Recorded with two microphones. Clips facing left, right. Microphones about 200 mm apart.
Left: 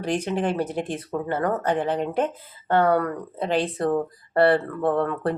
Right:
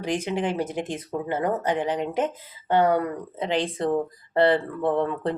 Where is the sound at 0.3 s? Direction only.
15° right (ahead or behind).